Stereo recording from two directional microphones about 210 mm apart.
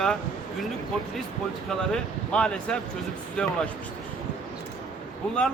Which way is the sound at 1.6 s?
5° left (ahead or behind).